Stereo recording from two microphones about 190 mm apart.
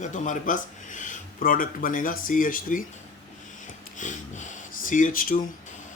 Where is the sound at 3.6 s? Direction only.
40° left (ahead or behind).